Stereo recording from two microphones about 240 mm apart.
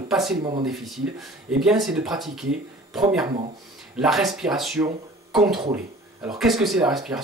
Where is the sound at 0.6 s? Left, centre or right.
Centre.